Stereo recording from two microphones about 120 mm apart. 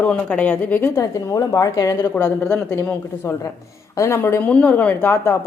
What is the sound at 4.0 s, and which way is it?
A woman's voice, 20° left (ahead or behind).